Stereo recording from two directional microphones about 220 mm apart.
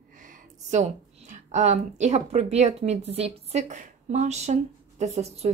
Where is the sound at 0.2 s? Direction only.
35° right (ahead or behind).